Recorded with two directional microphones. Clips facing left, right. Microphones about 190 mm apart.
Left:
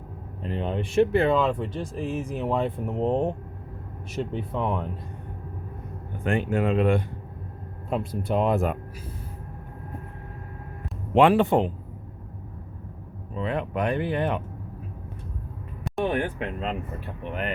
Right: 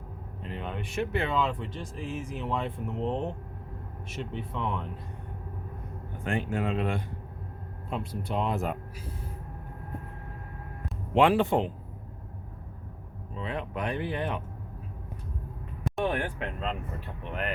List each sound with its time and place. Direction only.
0.4 s speech: 30° left (ahead or behind)
6.2 s speech: 65° left (ahead or behind)
7.9 s speech: 50° left (ahead or behind)
11.1 s speech: 55° left (ahead or behind)
13.4 s speech: 60° left (ahead or behind)
15.8 s a sound: centre (ahead or behind)